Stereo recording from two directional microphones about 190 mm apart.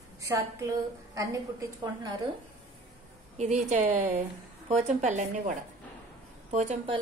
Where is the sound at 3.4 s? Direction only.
35° right (ahead or behind).